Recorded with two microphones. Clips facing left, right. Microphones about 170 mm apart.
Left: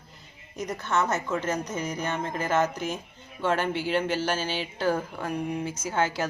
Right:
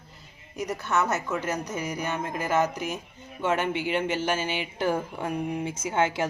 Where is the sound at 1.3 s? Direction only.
15° right (ahead or behind).